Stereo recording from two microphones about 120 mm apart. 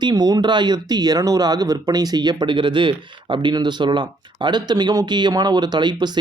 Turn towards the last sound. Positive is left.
turn(degrees=-40)  # may be behind; listen again after turning